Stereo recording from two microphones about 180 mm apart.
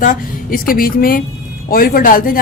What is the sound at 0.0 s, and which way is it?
A woman's voice, 45° left (ahead or behind).